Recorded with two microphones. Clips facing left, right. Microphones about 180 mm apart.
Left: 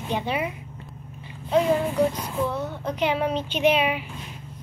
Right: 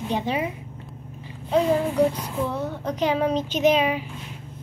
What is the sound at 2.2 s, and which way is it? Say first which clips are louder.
Speech: even; 35° right (ahead or behind).